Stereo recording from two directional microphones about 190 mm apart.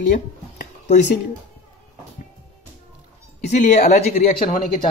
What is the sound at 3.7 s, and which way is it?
Speech, 40° left (ahead or behind).